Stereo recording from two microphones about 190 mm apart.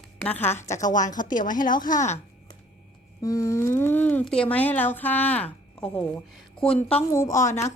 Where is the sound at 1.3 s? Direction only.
45° left (ahead or behind).